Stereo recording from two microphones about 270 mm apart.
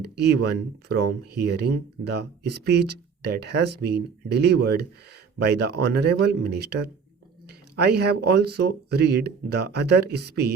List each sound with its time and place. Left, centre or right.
0.0 s speech: right